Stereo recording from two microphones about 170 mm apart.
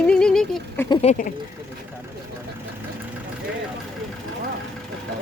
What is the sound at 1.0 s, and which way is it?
Speech, 45° left (ahead or behind).